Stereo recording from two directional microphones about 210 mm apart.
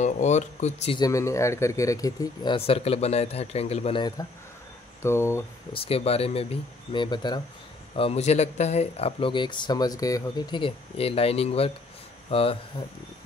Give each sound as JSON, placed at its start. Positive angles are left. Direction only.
{"t": 0.0, "sound": "speech", "side_deg": 35}
{"t": 1.0, "sound": "speech", "side_deg": 15}
{"t": 5.7, "sound": "speech", "side_deg": 30}